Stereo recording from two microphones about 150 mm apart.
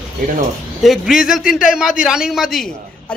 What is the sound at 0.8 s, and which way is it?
A man's voice, centre (ahead or behind).